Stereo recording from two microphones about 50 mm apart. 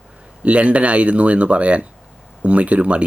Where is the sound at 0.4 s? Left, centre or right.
Right.